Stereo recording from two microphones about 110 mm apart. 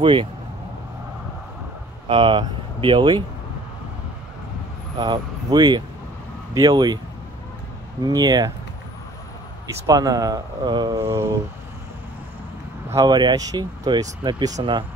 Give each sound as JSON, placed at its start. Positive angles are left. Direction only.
{"t": 0.0, "sound": "speech", "side_deg": -50}
{"t": 2.0, "sound": "speech", "side_deg": -50}
{"t": 4.9, "sound": "speech", "side_deg": -45}
{"t": 8.0, "sound": "speech", "side_deg": -35}
{"t": 9.8, "sound": "speech", "side_deg": -35}
{"t": 11.0, "sound": "a sound", "side_deg": -20}
{"t": 12.9, "sound": "speech", "side_deg": -40}
{"t": 14.6, "sound": "speech", "side_deg": -50}